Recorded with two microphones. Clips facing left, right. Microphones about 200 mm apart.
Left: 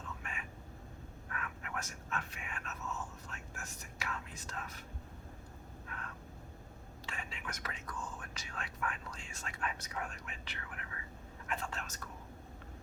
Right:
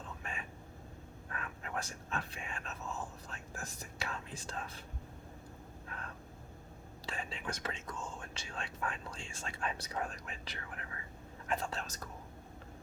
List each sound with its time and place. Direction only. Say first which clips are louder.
0.2 s a sound: right 2 dB; 30° right (ahead or behind)
1.3 s whispering: right 2 dB; 30° right (ahead or behind)
7.0 s speech: right 5 dB; 35° right (ahead or behind)